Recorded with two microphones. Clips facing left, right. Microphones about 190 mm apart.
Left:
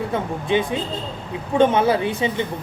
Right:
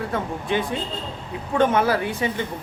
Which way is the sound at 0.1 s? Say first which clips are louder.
Left 5 dB; 20° left (ahead or behind).